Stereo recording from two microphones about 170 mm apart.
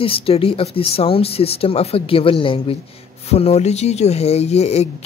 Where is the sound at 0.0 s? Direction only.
35° left (ahead or behind).